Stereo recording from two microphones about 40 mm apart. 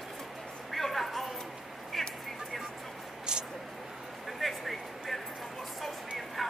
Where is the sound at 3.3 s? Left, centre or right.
Right.